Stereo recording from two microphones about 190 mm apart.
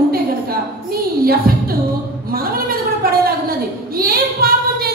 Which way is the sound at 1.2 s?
50° right (ahead or behind).